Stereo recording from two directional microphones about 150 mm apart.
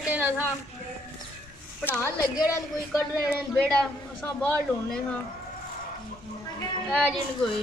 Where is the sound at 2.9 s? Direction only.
Centre (ahead or behind).